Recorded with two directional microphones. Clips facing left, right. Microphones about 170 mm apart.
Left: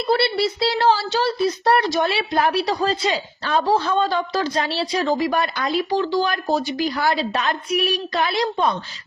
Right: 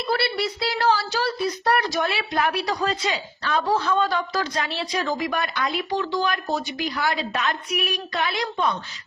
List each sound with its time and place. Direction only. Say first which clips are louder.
0.1 s speech: left 5 dB; 30° left (ahead or behind)